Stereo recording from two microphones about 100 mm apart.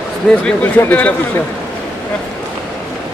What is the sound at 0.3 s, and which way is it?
Speech, 10° left (ahead or behind).